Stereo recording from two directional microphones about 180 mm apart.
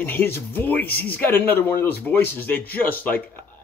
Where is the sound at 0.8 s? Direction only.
60° left (ahead or behind).